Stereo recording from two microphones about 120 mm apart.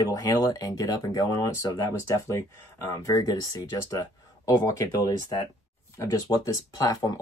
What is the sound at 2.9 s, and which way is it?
Speech, 30° left (ahead or behind).